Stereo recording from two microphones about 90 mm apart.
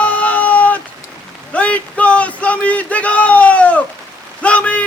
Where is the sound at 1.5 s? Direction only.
15° left (ahead or behind).